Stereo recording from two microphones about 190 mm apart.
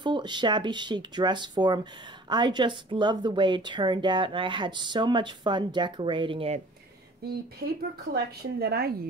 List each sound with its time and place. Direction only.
0.0 s a woman's voice: 25° right (ahead or behind)
7.6 s a woman's voice: 55° right (ahead or behind)